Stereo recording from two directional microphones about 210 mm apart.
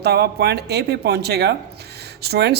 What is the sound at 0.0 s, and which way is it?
A woman's voice, 50° right (ahead or behind).